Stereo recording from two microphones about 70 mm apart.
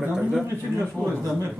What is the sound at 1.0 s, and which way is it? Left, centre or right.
Speech, left.